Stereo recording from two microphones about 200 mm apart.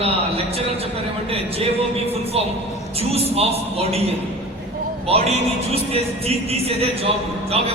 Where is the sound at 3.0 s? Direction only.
30° right (ahead or behind).